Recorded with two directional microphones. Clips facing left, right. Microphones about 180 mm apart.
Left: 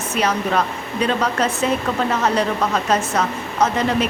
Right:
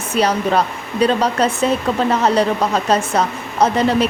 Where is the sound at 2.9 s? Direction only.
35° right (ahead or behind).